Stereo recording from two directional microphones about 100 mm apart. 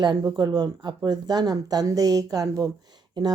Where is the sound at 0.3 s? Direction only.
45° right (ahead or behind).